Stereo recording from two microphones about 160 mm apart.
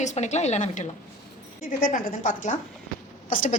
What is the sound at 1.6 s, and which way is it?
A woman's voice, 60° left (ahead or behind).